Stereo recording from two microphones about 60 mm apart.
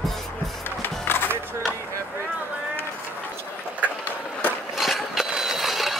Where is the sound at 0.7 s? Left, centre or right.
Left.